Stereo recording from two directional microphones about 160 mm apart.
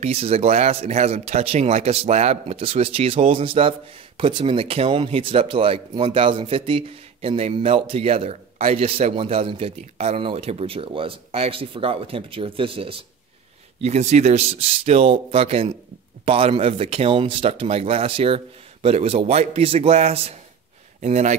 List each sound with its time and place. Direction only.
0.0 s speech: 40° right (ahead or behind)